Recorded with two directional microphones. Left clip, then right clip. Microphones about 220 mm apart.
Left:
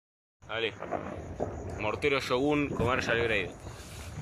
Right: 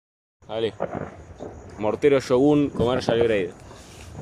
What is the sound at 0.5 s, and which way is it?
Speech, 25° right (ahead or behind).